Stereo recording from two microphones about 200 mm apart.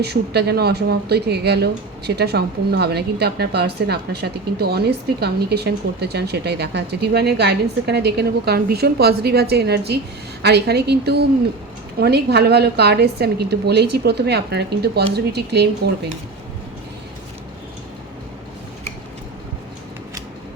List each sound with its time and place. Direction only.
0.0 s speech: 55° right (ahead or behind)